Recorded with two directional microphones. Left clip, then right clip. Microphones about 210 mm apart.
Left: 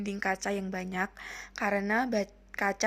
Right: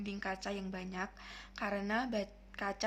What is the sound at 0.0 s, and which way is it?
A woman's voice, 30° left (ahead or behind).